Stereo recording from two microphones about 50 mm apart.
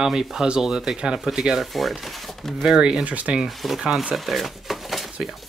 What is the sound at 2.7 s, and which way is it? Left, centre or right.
Speech, centre.